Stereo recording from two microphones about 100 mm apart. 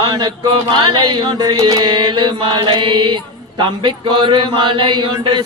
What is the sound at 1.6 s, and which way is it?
Mantra, 35° right (ahead or behind).